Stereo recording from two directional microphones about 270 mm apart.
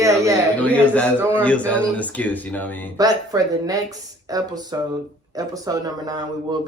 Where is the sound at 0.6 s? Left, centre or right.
Centre.